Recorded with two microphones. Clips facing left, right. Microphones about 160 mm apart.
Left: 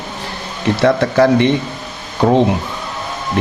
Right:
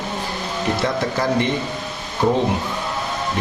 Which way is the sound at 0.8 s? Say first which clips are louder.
Left 13 dB; 75° left (ahead or behind).